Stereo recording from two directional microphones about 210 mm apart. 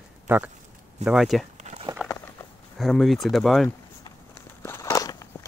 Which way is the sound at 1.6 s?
35° right (ahead or behind).